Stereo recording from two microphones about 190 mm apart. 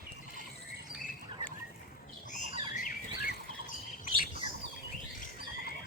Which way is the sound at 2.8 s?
55° left (ahead or behind).